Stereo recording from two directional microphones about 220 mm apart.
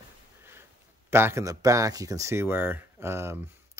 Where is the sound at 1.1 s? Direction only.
10° right (ahead or behind).